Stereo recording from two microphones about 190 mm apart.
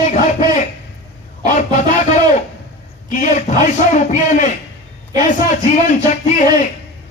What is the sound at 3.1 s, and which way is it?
Speech, 40° left (ahead or behind).